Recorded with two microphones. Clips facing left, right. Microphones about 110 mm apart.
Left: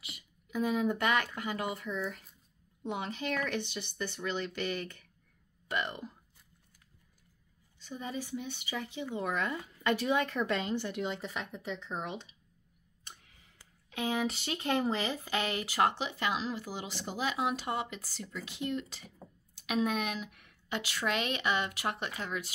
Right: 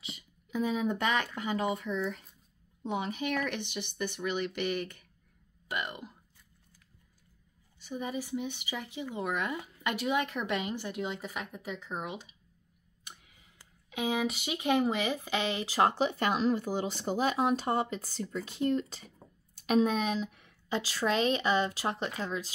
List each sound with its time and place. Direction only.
0.0 s speech: 25° right (ahead or behind)
7.8 s speech: 15° right (ahead or behind)
13.8 s speech: 15° right (ahead or behind); by 16.1 s 30° right (ahead or behind)
16.1 s a woman's voice: 50° right (ahead or behind); by 22.5 s 30° right (ahead or behind)